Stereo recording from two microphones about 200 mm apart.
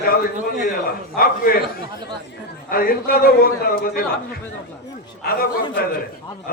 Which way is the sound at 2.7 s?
45° left (ahead or behind).